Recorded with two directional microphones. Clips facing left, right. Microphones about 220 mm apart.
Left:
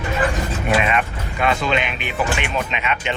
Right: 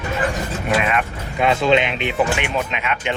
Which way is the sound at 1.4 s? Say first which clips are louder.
Right 4 dB; 20° right (ahead or behind).